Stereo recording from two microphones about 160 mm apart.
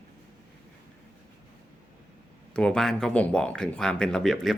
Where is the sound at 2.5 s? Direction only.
5° left (ahead or behind).